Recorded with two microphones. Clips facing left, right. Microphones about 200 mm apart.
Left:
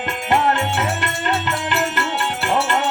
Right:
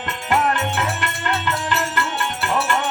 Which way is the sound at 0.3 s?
25° left (ahead or behind).